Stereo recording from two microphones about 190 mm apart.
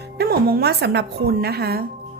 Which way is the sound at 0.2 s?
55° right (ahead or behind).